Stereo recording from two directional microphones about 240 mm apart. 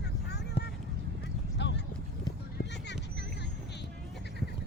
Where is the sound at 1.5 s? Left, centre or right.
Left.